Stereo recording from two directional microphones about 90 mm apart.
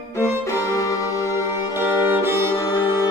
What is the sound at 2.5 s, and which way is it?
Music, 45° left (ahead or behind).